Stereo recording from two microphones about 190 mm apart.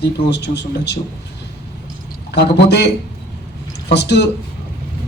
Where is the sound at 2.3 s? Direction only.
60° left (ahead or behind).